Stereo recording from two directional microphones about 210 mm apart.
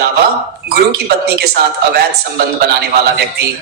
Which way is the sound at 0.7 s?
50° right (ahead or behind).